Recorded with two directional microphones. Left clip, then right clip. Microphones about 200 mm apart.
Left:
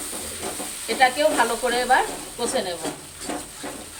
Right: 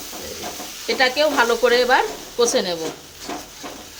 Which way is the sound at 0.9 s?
55° right (ahead or behind).